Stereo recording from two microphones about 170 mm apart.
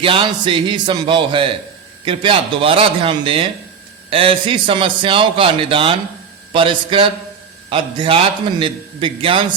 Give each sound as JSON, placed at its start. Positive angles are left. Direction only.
{"t": 0.0, "sound": "a man's voice", "side_deg": -30}